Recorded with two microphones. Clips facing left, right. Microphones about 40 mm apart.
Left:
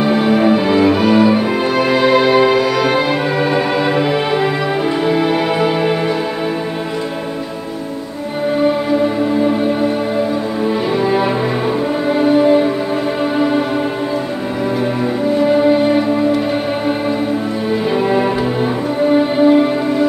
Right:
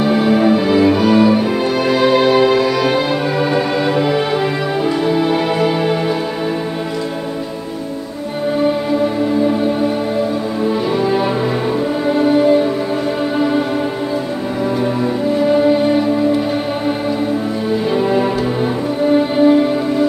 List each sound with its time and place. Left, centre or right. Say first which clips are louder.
0.0 s music: even; centre
11.1 s music: left 1 dB; centre
17.9 s music: even; centre